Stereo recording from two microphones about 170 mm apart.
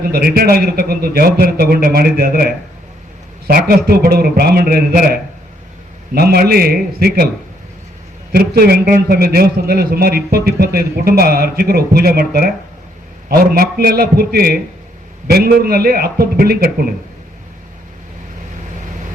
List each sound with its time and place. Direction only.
0.0 s a man's voice: 65° right (ahead or behind)
6.1 s a man's voice: 65° right (ahead or behind)
8.3 s a man's voice: 65° right (ahead or behind)